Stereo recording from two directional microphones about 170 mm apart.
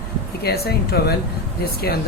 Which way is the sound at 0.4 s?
65° left (ahead or behind).